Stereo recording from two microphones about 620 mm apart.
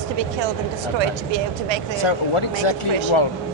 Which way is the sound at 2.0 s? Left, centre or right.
Left.